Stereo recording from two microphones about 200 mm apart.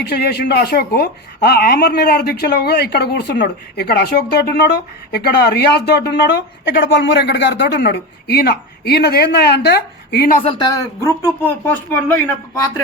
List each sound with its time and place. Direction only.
0.0 s speech: 55° left (ahead or behind)
10.4 s speech: 20° left (ahead or behind)